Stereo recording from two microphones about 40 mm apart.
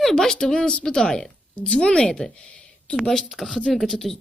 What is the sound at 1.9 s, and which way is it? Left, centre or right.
Speech, centre.